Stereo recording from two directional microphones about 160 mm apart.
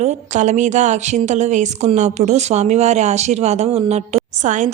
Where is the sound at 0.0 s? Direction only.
45° right (ahead or behind).